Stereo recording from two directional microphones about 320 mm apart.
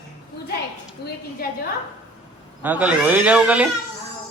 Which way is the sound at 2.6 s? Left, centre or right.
Centre.